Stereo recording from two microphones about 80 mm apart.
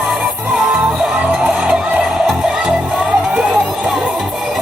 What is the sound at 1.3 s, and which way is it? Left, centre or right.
Music, centre.